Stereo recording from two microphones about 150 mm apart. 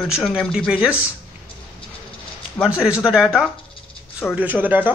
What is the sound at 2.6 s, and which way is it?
Speech, 5° right (ahead or behind).